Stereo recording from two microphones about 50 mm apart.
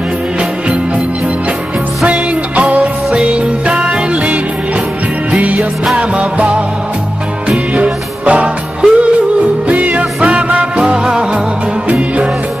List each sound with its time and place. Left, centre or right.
2.0 s music: right
5.3 s music: right